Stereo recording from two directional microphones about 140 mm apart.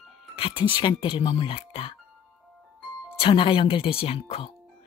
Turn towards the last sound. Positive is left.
turn(degrees=45)  # may be behind; listen again after turning